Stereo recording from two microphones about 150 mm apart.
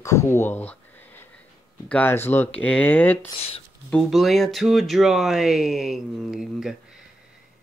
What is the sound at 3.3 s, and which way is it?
Speech, 40° left (ahead or behind).